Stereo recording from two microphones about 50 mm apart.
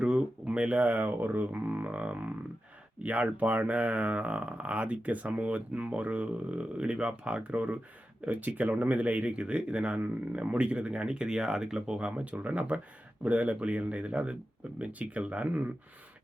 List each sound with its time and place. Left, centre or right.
0.0 s speech: centre